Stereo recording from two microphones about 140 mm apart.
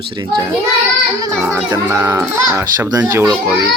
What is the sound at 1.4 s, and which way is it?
A child's voice, 20° right (ahead or behind).